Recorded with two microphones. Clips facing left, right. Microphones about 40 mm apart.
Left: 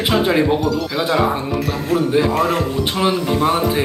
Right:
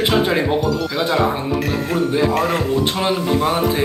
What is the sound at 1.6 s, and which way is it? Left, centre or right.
Speech, centre.